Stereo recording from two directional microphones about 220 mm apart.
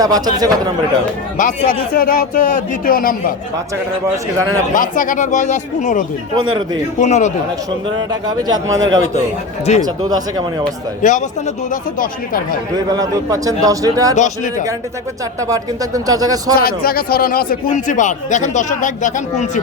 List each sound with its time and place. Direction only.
0.0 s a man's voice: 15° right (ahead or behind)
1.4 s a man's voice: 40° left (ahead or behind)
4.7 s a man's voice: 35° left (ahead or behind)
7.9 s a man's voice: 20° right (ahead or behind)
8.8 s a man's voice: 60° right (ahead or behind)
9.7 s a man's voice: 30° left (ahead or behind)
10.1 s a man's voice: 20° right (ahead or behind)
11.0 s a man's voice: 35° left (ahead or behind)
12.9 s a man's voice: 15° right (ahead or behind)
14.2 s a man's voice: 35° left (ahead or behind)
15.4 s a man's voice: 15° right (ahead or behind)
16.6 s a man's voice: 45° left (ahead or behind)